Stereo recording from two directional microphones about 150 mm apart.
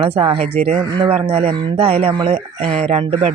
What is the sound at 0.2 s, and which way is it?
Speech, 35° right (ahead or behind).